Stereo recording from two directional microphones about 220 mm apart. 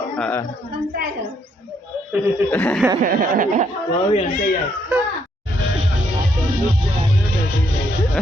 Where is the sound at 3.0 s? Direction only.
40° right (ahead or behind).